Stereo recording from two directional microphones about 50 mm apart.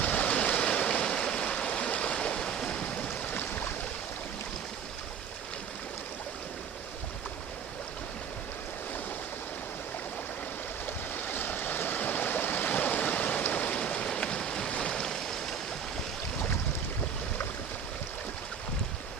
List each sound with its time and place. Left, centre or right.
0.0 s stream: left
10.8 s stream: left; by 15.5 s centre